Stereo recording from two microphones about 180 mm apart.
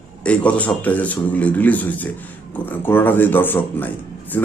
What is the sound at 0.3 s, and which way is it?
Speech, 5° left (ahead or behind).